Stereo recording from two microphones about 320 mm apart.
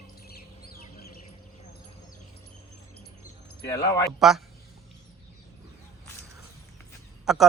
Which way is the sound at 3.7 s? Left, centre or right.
Centre.